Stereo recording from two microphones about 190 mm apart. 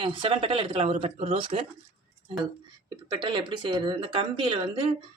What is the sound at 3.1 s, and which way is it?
Speech, 25° right (ahead or behind).